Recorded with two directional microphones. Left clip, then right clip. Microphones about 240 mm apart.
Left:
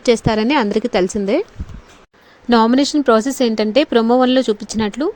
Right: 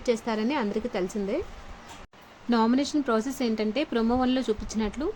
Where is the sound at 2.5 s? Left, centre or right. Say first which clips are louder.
Left 11 dB; left.